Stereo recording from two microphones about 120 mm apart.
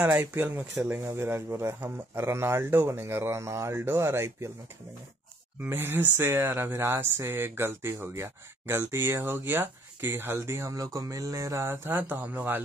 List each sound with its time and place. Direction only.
0.0 s speech: 20° right (ahead or behind)
5.6 s speech: 20° right (ahead or behind)